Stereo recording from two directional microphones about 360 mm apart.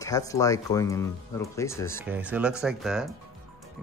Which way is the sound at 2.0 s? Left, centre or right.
Centre.